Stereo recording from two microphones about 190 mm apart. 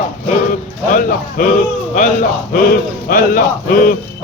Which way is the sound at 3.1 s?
50° left (ahead or behind).